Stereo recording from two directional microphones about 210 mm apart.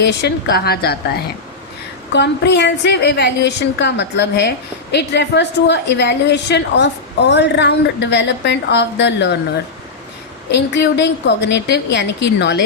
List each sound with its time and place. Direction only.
0.0 s a woman's voice: 55° left (ahead or behind)
10.5 s a woman's voice: 55° left (ahead or behind)